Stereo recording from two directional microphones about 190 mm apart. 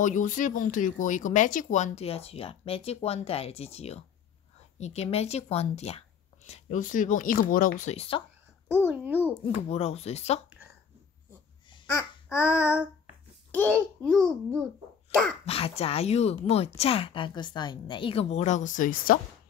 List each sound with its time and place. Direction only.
0.0 s speech: 40° left (ahead or behind)
8.8 s a child's voice: 10° right (ahead or behind)
9.5 s speech: 35° left (ahead or behind)
11.9 s child singing: 15° left (ahead or behind)
13.5 s a child's voice: 10° left (ahead or behind)
15.4 s speech: 30° left (ahead or behind)